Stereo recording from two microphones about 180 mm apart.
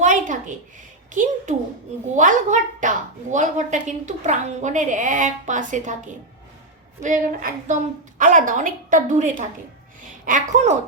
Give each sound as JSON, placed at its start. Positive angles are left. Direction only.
{"t": 0.0, "sound": "a sound", "side_deg": -45}
{"t": 1.1, "sound": "a woman's voice", "side_deg": -45}
{"t": 7.0, "sound": "a woman's voice", "side_deg": -45}